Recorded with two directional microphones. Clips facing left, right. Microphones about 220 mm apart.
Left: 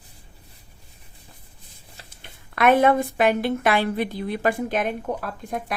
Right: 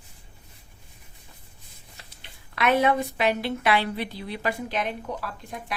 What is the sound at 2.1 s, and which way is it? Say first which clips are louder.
A woman's voice: left 5 dB; 50° left (ahead or behind).